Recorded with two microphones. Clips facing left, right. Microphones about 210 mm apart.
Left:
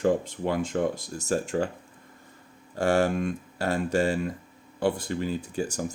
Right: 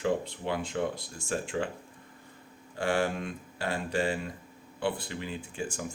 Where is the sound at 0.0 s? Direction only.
45° left (ahead or behind).